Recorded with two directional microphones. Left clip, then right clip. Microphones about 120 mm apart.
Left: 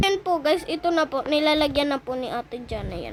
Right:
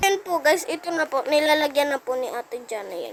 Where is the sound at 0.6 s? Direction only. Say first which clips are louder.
Left 3 dB; 5° left (ahead or behind).